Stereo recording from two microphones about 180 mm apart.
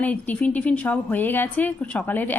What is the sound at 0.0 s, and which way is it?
A woman's voice, 10° left (ahead or behind).